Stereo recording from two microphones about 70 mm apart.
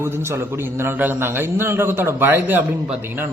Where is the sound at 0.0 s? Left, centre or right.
Right.